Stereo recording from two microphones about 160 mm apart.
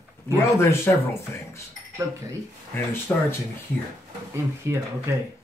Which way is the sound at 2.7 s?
15° left (ahead or behind).